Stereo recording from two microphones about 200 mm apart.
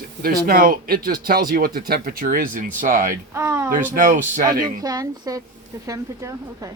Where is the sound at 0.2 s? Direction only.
45° right (ahead or behind).